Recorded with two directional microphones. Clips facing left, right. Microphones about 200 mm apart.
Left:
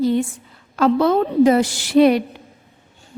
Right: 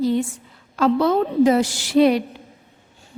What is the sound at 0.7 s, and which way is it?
A woman's voice, 55° left (ahead or behind).